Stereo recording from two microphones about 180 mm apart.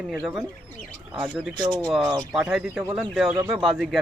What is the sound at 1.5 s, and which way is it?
Speech, 25° right (ahead or behind).